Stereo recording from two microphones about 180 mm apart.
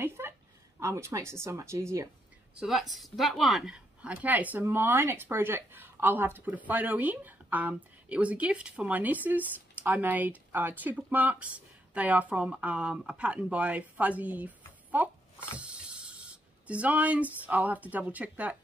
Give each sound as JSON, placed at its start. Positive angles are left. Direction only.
{"t": 0.2, "sound": "a sound", "side_deg": -15}
{"t": 0.7, "sound": "speech", "side_deg": -15}
{"t": 2.6, "sound": "a woman's voice", "side_deg": 0}